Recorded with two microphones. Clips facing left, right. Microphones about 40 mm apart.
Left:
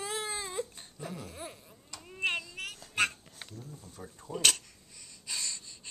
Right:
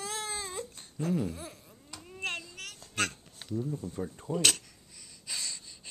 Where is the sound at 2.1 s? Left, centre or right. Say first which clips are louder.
Left 4 dB; centre.